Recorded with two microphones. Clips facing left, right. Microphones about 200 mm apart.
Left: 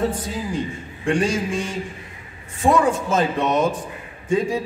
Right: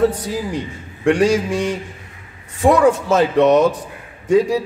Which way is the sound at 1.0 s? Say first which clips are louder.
Right 6 dB; 70° right (ahead or behind).